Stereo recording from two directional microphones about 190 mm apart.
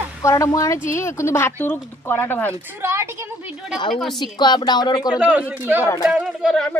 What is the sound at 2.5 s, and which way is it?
Speech, 15° right (ahead or behind).